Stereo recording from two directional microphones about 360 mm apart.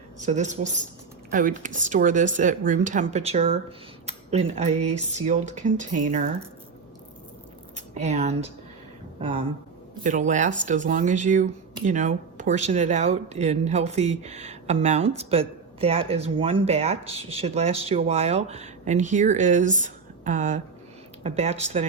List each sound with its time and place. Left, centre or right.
0.3 s speech: centre
7.9 s speech: centre
10.0 s speech: right